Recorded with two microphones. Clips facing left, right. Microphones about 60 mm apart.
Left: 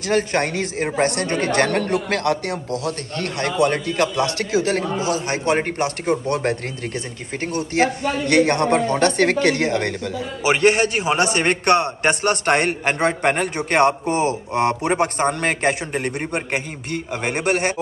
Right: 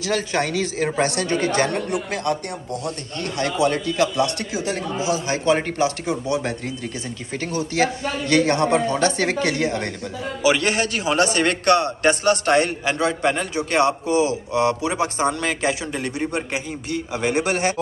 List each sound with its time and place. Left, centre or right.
0.0 s a man's voice: left
1.5 s speech: left
3.3 s a man's voice: left
4.5 s a man's voice: left
7.3 s a man's voice: left
10.4 s a man's voice: left